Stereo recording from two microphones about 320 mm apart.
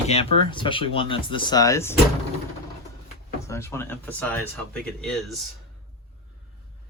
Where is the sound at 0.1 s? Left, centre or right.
Centre.